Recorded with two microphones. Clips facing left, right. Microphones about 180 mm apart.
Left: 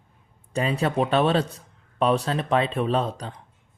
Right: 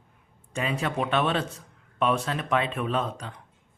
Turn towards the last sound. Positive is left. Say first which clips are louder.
# left 4 dB
turn(degrees=35)  # may be behind; listen again after turning